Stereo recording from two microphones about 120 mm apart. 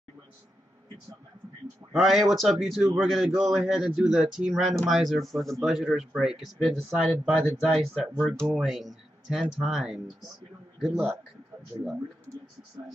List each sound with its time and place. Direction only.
1.9 s speech: centre (ahead or behind)